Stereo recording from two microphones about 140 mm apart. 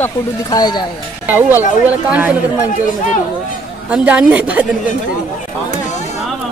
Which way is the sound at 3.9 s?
10° right (ahead or behind).